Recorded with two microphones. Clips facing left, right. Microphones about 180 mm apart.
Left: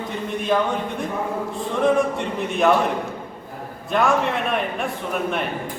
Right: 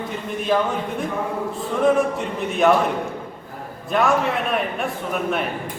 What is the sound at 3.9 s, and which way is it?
Speech, centre (ahead or behind).